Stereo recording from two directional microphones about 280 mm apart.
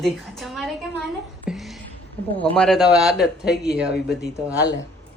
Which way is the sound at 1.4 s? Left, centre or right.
Centre.